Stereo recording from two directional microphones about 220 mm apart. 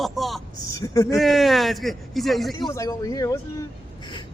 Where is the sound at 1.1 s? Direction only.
Centre (ahead or behind).